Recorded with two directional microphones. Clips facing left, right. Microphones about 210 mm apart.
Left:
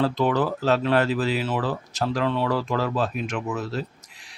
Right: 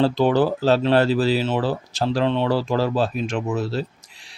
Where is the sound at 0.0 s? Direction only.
30° right (ahead or behind).